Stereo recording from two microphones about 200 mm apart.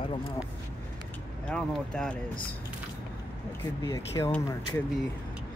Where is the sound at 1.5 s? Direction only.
5° left (ahead or behind).